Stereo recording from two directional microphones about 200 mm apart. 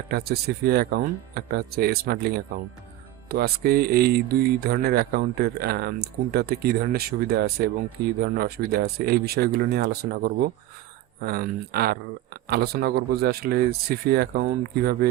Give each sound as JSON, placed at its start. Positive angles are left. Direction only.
{"t": 0.1, "sound": "speech", "side_deg": -50}